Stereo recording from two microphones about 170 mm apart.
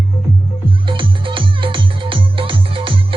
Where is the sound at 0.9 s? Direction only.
30° right (ahead or behind).